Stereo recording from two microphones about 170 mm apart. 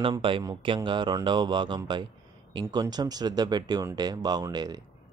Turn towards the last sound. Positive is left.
turn(degrees=-25)  # may be behind; listen again after turning